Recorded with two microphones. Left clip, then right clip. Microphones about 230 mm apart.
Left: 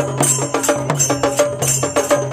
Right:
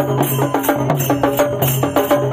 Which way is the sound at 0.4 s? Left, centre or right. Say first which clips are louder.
Right 1 dB; left.